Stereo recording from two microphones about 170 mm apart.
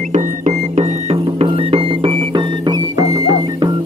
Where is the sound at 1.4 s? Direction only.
30° right (ahead or behind).